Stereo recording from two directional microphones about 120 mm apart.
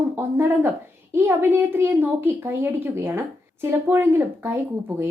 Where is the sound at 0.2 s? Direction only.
20° right (ahead or behind).